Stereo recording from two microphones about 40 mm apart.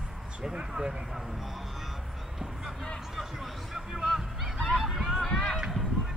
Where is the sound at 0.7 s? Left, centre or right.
Centre.